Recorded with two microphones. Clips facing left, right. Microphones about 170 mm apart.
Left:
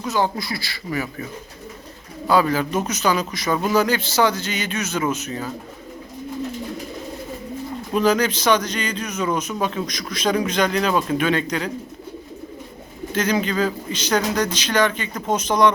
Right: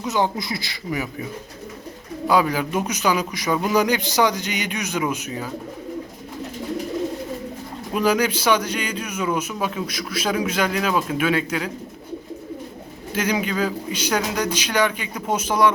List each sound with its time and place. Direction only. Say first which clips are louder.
0.0 s speech: even; 20° right (ahead or behind)
2.2 s a man's voice: left 1 dB; 15° right (ahead or behind)
7.9 s a man's voice: left 1 dB; 10° right (ahead or behind)
13.1 s a man's voice: left 2 dB; 10° right (ahead or behind)